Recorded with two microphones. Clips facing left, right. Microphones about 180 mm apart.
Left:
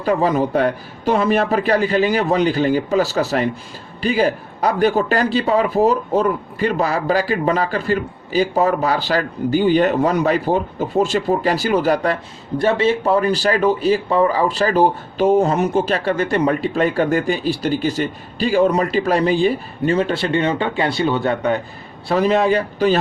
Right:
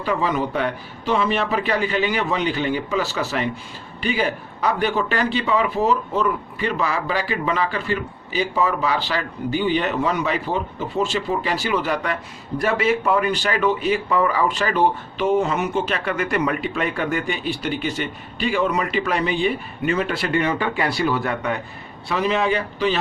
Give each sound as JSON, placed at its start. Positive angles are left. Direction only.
{"t": 0.0, "sound": "speech", "side_deg": 40}
{"t": 12.5, "sound": "speech", "side_deg": 30}